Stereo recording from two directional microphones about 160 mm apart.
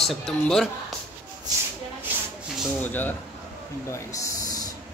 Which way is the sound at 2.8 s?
10° left (ahead or behind).